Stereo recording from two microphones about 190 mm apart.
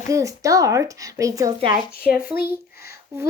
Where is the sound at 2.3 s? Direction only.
55° left (ahead or behind).